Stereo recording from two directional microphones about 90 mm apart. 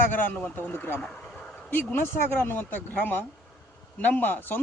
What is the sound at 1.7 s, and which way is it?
Speech, 20° left (ahead or behind).